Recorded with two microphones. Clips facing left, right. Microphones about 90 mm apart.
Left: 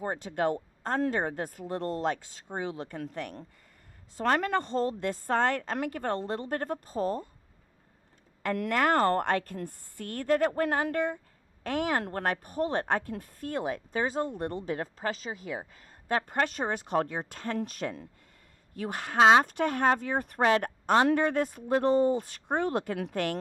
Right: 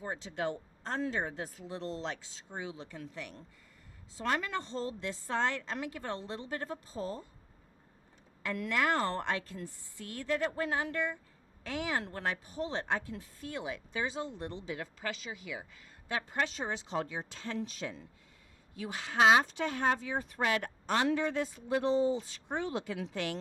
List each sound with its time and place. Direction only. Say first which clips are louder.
0.0 s a woman's voice: left 7 dB; 55° left (ahead or behind)
8.4 s a woman's voice: left 5 dB; 55° left (ahead or behind)